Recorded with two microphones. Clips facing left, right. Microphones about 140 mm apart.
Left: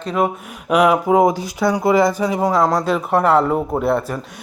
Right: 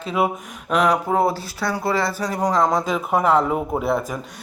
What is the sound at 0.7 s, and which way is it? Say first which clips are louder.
Speech: left 5 dB; 10° left (ahead or behind).